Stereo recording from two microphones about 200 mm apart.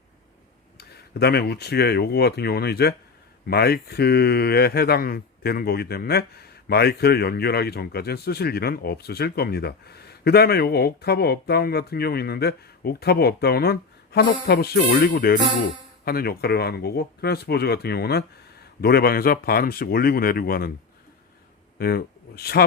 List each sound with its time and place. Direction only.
0.8 s speech: 55° left (ahead or behind)
21.8 s speech: 50° left (ahead or behind)